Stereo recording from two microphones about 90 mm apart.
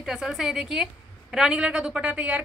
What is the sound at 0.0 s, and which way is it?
A woman's voice, 5° right (ahead or behind).